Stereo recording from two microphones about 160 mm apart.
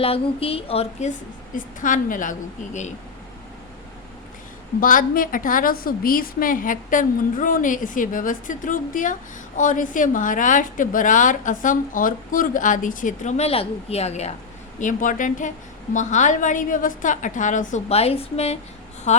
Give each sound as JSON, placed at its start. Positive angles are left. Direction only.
{"t": 0.0, "sound": "speech", "side_deg": 35}
{"t": 1.5, "sound": "a woman's voice", "side_deg": 55}
{"t": 4.8, "sound": "a woman's voice", "side_deg": 60}
{"t": 14.8, "sound": "a woman's voice", "side_deg": 55}